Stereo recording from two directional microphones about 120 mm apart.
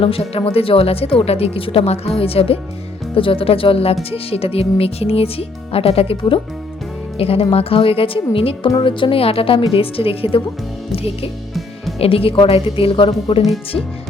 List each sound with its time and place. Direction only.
0.0 s a woman's voice: 50° left (ahead or behind)
13.4 s speech: centre (ahead or behind)